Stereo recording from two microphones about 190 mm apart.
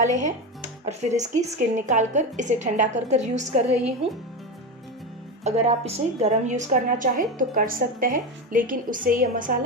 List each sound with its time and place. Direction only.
0.9 s a woman's voice: 35° right (ahead or behind)
5.4 s a woman's voice: 35° right (ahead or behind)